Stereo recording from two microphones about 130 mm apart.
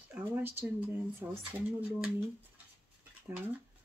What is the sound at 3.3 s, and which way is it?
Speech, 20° right (ahead or behind).